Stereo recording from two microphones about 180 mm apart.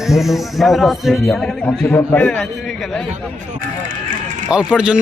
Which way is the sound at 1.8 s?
15° left (ahead or behind).